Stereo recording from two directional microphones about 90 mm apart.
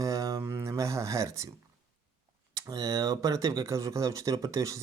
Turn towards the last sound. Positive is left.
turn(degrees=-35)  # may be behind; listen again after turning